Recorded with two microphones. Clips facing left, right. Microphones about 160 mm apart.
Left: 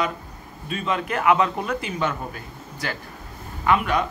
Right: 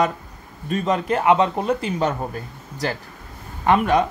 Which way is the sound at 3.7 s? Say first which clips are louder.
Right 4 dB; 40° right (ahead or behind).